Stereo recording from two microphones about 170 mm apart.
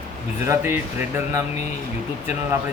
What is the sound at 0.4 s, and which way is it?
Speech, 15° right (ahead or behind).